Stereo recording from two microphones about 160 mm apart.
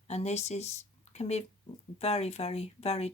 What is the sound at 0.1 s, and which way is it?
Speech, 40° left (ahead or behind).